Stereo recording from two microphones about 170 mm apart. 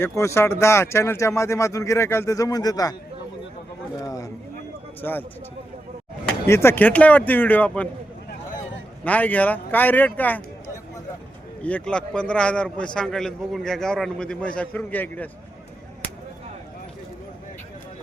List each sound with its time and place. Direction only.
0.0 s speech: 15° left (ahead or behind)
4.0 s a sound: 20° left (ahead or behind)
5.0 s speech: 10° left (ahead or behind)
6.5 s speech: 15° left (ahead or behind)
9.0 s speech: 10° left (ahead or behind)
11.6 s a man's voice: 5° left (ahead or behind)